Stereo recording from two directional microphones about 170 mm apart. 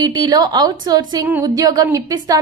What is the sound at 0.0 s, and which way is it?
A woman's voice, 25° right (ahead or behind).